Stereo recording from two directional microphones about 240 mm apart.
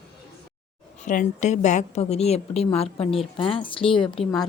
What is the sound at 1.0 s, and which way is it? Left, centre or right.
A woman's voice, left.